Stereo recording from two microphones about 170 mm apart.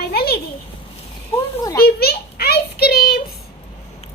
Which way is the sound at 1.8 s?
65° left (ahead or behind).